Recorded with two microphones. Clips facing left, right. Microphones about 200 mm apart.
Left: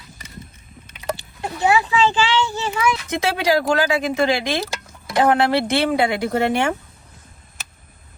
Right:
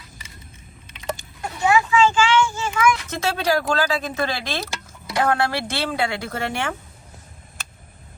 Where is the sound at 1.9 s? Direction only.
35° left (ahead or behind).